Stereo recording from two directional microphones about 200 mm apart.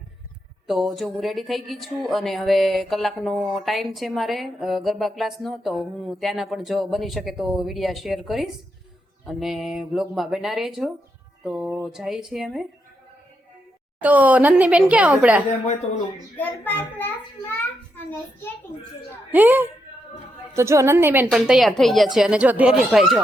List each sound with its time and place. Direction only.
0.7 s speech: centre (ahead or behind)
14.0 s a woman's voice: 10° right (ahead or behind)
15.6 s speech: 35° left (ahead or behind)
16.3 s a child's voice: 10° left (ahead or behind)
19.3 s a woman's voice: 10° right (ahead or behind)